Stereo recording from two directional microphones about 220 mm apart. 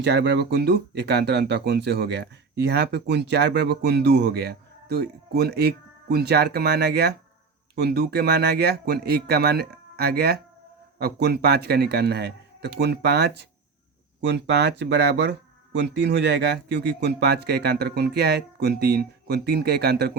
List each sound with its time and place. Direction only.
0.0 s speech: 50° right (ahead or behind)